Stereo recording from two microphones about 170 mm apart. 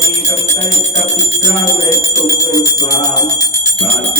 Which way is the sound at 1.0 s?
20° left (ahead or behind).